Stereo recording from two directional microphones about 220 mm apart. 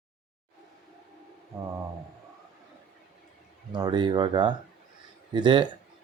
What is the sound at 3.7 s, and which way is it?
A man's voice, 20° right (ahead or behind).